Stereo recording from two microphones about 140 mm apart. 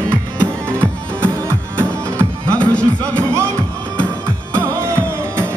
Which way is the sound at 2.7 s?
10° left (ahead or behind).